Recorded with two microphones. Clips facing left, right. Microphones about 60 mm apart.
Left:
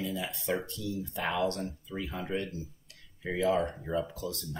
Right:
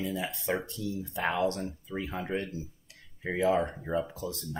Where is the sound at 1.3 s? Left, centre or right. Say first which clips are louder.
Even; centre.